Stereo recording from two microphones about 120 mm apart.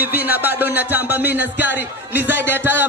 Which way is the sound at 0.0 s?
15° right (ahead or behind).